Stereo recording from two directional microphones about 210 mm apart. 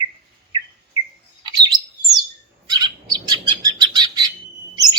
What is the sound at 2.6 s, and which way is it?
Chirp, 20° right (ahead or behind).